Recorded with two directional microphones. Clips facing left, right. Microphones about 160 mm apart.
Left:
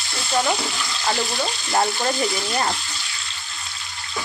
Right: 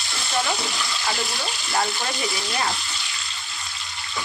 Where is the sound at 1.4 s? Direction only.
25° left (ahead or behind).